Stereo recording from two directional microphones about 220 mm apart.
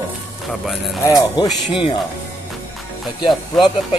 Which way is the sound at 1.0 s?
15° left (ahead or behind).